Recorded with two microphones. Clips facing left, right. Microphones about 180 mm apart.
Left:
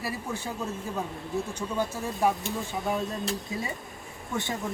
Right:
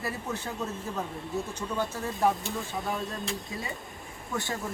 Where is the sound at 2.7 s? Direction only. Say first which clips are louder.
Left 5 dB; centre (ahead or behind).